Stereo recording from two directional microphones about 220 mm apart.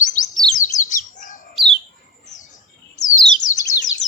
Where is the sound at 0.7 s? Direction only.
35° left (ahead or behind).